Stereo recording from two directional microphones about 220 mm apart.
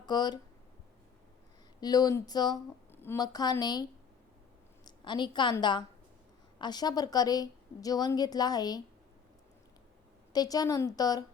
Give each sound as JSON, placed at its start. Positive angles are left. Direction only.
{"t": 0.0, "sound": "speech", "side_deg": 20}
{"t": 1.8, "sound": "a woman's voice", "side_deg": 15}
{"t": 4.9, "sound": "a woman's voice", "side_deg": 20}
{"t": 10.3, "sound": "a woman's voice", "side_deg": 15}